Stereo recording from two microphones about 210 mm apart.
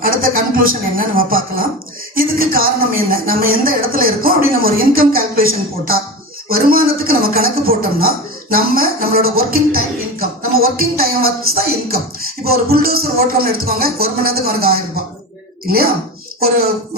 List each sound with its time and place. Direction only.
0.0 s a man's voice: 45° right (ahead or behind)